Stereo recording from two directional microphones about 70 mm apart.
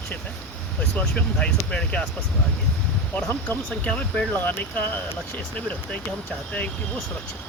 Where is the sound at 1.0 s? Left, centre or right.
Centre.